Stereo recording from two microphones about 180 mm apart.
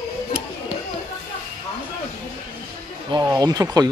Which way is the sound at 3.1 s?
20° right (ahead or behind).